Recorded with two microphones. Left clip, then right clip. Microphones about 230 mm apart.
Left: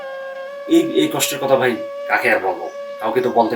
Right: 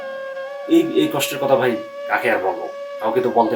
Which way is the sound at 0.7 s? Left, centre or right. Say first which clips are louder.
Left 1 dB; centre.